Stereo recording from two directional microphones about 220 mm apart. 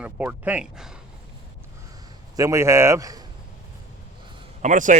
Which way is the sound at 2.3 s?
15° right (ahead or behind).